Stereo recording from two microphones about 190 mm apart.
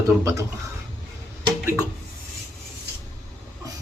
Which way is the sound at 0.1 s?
15° right (ahead or behind).